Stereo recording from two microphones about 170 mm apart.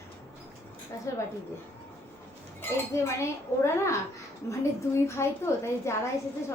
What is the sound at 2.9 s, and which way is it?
A woman's voice, 15° left (ahead or behind).